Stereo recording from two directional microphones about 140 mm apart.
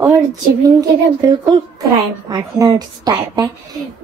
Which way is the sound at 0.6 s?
25° right (ahead or behind).